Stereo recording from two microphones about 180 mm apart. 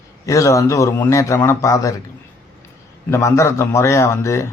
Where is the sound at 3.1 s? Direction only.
15° left (ahead or behind).